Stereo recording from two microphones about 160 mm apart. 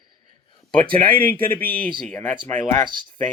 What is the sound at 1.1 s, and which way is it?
Speech, 65° right (ahead or behind).